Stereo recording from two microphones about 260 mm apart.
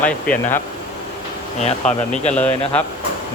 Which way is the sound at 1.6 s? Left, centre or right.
Left.